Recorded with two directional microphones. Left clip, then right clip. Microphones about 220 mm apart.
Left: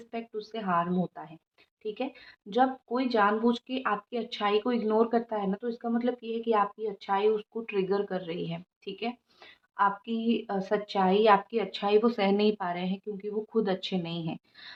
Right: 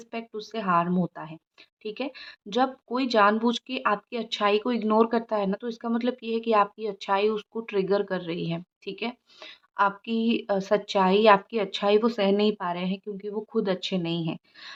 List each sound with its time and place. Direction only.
0.0 s speech: 40° right (ahead or behind)